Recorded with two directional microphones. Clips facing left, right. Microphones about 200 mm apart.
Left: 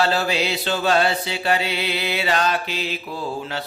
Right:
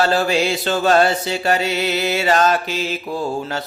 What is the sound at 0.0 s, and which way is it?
Mantra, 45° right (ahead or behind).